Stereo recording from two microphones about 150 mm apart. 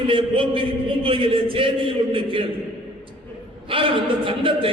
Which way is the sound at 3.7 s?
35° right (ahead or behind).